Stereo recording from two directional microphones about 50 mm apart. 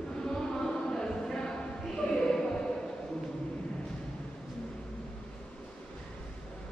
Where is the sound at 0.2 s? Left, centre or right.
Centre.